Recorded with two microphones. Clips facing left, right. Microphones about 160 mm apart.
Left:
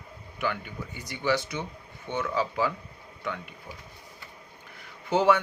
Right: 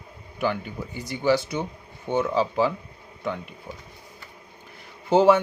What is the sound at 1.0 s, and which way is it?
Speech, 30° right (ahead or behind).